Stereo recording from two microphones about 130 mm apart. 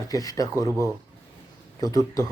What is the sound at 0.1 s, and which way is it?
A man's voice, 30° left (ahead or behind).